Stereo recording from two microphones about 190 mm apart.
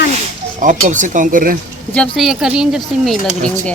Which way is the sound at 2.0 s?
Centre (ahead or behind).